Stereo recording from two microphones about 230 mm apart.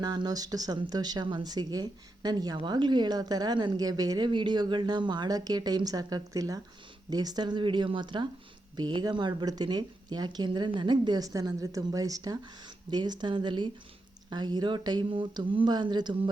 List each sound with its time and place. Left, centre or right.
0.0 s speech: centre